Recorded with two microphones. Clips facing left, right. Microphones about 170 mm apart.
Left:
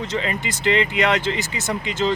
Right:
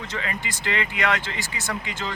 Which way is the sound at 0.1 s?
20° left (ahead or behind).